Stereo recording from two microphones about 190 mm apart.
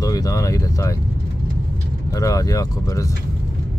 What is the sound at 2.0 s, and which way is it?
Speech, 15° left (ahead or behind).